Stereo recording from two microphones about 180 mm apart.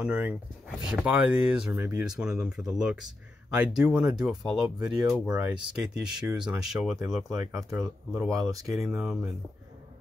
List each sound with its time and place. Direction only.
0.0 s speech: 5° right (ahead or behind)
7.3 s speech: 15° right (ahead or behind)
8.7 s speech: centre (ahead or behind)